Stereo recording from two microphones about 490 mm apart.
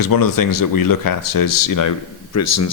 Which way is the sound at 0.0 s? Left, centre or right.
Left.